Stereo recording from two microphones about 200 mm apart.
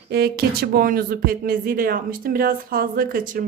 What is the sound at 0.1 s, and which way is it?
A woman's voice, 55° right (ahead or behind).